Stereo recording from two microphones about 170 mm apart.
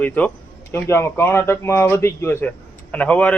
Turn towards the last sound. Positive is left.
turn(degrees=10)  # may be behind; listen again after turning